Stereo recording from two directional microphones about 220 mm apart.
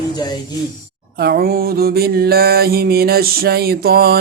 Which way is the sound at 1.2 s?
45° right (ahead or behind).